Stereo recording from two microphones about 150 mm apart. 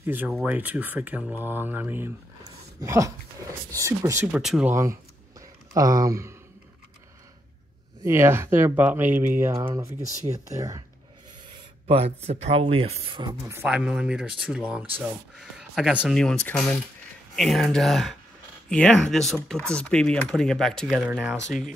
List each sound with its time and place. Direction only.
0.0 s speech: 15° right (ahead or behind)
0.3 s speech: centre (ahead or behind); by 4.2 s 20° right (ahead or behind)
4.3 s speech: 5° right (ahead or behind)
5.7 s speech: 25° right (ahead or behind)
8.0 s speech: 15° right (ahead or behind)
12.3 s speech: 45° right (ahead or behind)
13.7 s speech: 5° right (ahead or behind)